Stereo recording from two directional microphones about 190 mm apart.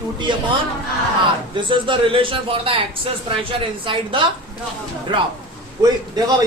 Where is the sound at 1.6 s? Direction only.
25° right (ahead or behind).